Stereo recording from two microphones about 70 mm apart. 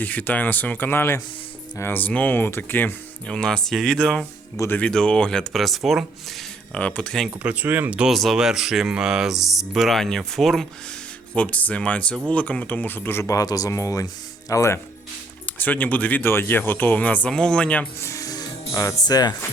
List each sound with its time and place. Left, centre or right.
0.0 s speech: left
3.2 s speech: centre
6.7 s speech: centre
7.3 s speech: centre
8.1 s speech: centre
11.3 s speech: centre
13.2 s speech: left
15.4 s speech: left
18.0 s music: left
18.7 s speech: left
19.0 s speech: left